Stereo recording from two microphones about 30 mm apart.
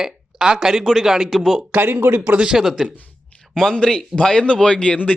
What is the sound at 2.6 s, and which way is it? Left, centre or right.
Speech, centre.